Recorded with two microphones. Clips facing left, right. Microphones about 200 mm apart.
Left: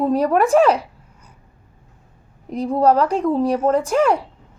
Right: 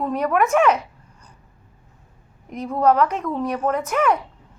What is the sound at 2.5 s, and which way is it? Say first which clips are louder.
A child's voice: left 3 dB; 35° left (ahead or behind).